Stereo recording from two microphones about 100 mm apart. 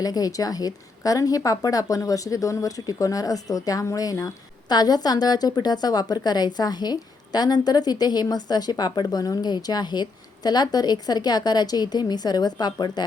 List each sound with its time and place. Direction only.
0.0 s a woman's voice: 40° left (ahead or behind)